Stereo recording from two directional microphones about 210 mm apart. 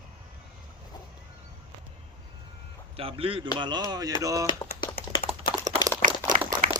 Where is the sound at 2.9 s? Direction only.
25° right (ahead or behind).